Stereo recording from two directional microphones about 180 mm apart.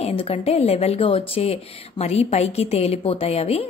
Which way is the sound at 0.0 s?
30° left (ahead or behind).